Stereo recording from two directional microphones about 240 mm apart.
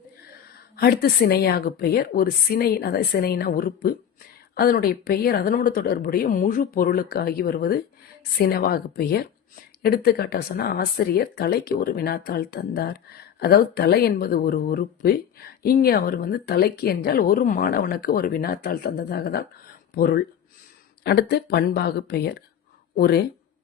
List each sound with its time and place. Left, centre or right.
0.8 s speech: left